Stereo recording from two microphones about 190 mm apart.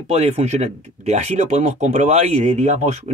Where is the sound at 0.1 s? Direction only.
35° right (ahead or behind).